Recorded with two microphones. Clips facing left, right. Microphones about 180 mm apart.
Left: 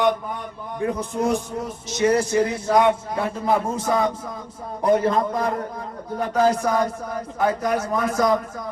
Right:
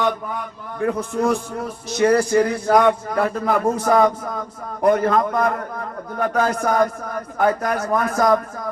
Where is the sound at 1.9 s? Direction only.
60° right (ahead or behind).